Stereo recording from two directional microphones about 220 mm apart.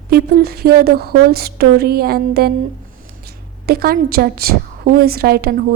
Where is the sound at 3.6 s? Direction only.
45° right (ahead or behind).